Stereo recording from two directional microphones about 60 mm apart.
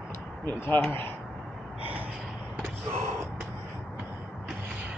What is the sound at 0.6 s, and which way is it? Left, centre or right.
Speech, left.